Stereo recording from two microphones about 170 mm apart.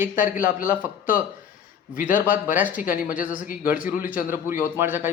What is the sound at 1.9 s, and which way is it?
A man's voice, 55° left (ahead or behind).